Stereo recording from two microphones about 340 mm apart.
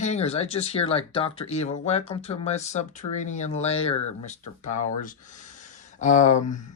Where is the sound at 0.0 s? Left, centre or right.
Centre.